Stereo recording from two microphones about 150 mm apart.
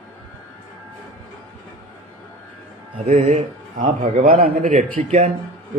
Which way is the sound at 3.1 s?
45° right (ahead or behind).